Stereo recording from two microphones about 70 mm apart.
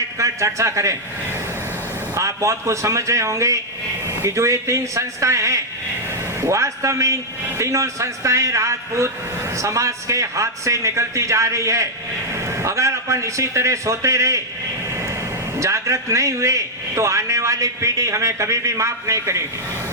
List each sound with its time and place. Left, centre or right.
0.2 s a man's voice: right
2.1 s a man's voice: right
15.6 s a man's voice: right